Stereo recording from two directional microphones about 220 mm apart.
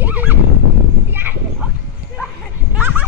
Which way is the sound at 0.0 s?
10° right (ahead or behind).